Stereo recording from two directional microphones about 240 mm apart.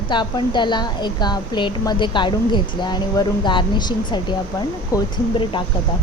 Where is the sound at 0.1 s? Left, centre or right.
Centre.